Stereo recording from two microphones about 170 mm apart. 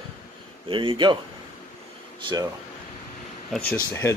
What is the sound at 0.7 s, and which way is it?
Speech, 30° right (ahead or behind).